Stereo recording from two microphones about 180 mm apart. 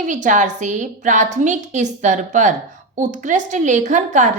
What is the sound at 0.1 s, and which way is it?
A woman's voice, 45° right (ahead or behind).